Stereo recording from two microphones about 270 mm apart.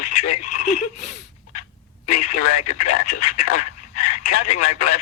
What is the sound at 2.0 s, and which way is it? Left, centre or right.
Speech, left.